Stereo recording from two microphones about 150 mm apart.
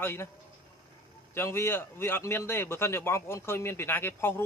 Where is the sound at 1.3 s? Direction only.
15° left (ahead or behind).